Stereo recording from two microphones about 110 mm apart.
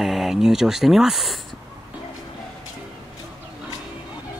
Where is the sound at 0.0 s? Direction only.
5° right (ahead or behind).